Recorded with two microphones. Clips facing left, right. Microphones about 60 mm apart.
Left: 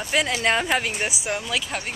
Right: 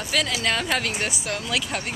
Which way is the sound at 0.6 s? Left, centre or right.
Centre.